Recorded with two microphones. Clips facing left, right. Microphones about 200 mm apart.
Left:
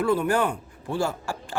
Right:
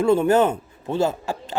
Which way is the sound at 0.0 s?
25° right (ahead or behind).